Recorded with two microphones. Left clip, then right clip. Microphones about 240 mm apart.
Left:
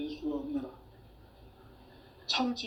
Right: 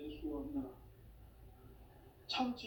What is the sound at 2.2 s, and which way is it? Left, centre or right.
Speech, left.